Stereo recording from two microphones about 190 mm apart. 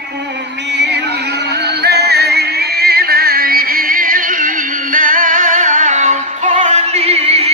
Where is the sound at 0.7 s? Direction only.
65° right (ahead or behind).